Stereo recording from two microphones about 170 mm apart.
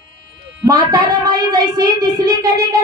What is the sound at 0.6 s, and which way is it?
Speech, 20° right (ahead or behind).